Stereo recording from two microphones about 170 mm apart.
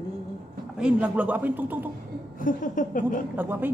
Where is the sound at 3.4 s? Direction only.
10° right (ahead or behind).